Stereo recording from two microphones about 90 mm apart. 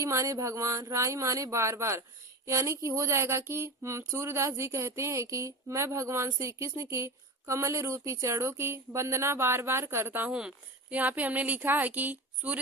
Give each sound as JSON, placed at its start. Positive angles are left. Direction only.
{"t": 0.0, "sound": "a woman's voice", "side_deg": -35}